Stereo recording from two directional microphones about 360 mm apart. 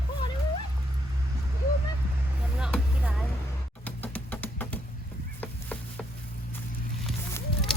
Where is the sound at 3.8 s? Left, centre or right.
Centre.